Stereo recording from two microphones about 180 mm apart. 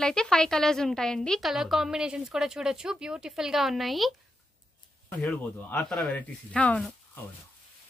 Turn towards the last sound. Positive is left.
turn(degrees=5)  # may be behind; listen again after turning